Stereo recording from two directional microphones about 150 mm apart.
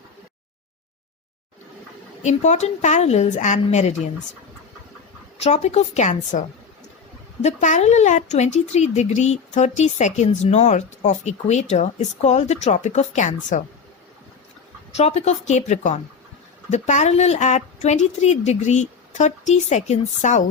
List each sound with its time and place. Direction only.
2.2 s speech: 50° left (ahead or behind)
5.4 s speech: 45° left (ahead or behind)
7.4 s speech: 50° left (ahead or behind)
14.9 s speech: 45° left (ahead or behind)